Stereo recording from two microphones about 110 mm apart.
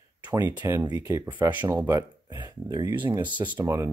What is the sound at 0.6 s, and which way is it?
Speech, 20° right (ahead or behind).